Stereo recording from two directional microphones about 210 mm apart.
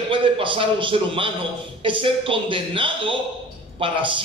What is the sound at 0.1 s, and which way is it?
A man's voice, 25° right (ahead or behind).